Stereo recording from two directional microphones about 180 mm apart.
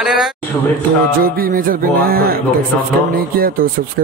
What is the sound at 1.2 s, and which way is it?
Music, 55° right (ahead or behind).